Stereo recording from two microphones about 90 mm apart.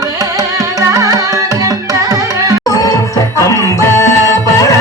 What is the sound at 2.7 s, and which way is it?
Music, 40° left (ahead or behind).